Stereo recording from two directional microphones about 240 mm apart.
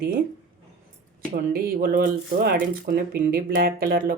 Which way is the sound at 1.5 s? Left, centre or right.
Right.